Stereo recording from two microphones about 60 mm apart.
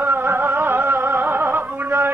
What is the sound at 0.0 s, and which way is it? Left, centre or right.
Music, right.